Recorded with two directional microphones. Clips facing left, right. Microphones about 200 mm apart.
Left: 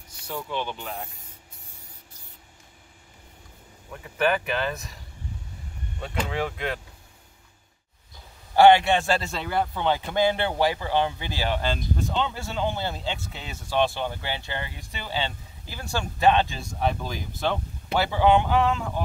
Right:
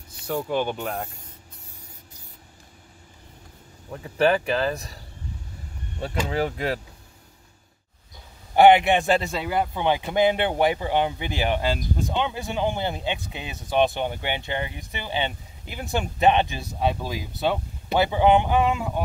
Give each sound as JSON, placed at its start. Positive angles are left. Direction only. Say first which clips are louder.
{"t": 0.3, "sound": "speech", "louder": "right 6 dB", "side_deg": -50}
{"t": 3.9, "sound": "speech", "louder": "right 4 dB", "side_deg": -30}
{"t": 6.2, "sound": "speech", "louder": "right 4 dB", "side_deg": -35}
{"t": 8.5, "sound": "a man's voice", "louder": "right 1 dB", "side_deg": -20}
{"t": 16.8, "sound": "a man's voice", "louder": "right 2 dB", "side_deg": -10}
{"t": 17.9, "sound": "a man's voice", "louder": "right 2 dB", "side_deg": -20}